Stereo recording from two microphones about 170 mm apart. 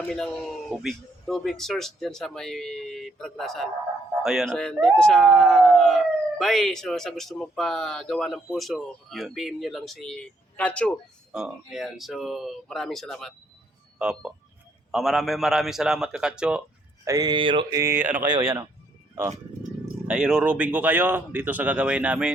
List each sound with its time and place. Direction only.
0.7 s speech: centre (ahead or behind)
11.3 s speech: 5° right (ahead or behind)
17.1 s speech: 25° right (ahead or behind)
17.7 s speech: 15° right (ahead or behind)
19.8 s speech: 5° right (ahead or behind)